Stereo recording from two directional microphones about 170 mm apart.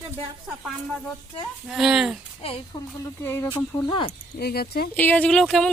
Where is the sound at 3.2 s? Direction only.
15° left (ahead or behind).